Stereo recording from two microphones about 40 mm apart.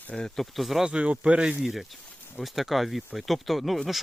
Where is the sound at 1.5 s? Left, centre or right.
Centre.